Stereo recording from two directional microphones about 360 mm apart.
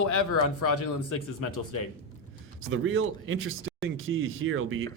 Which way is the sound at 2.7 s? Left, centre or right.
Right.